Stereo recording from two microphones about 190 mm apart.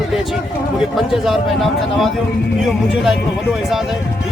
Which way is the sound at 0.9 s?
Centre (ahead or behind).